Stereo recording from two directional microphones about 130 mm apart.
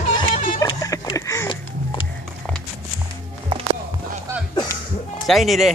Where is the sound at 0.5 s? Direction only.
30° left (ahead or behind).